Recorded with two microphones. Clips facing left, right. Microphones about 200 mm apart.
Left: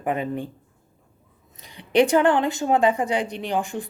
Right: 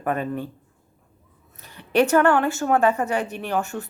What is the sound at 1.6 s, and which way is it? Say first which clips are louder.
A woman's voice: left 1 dB; 15° left (ahead or behind).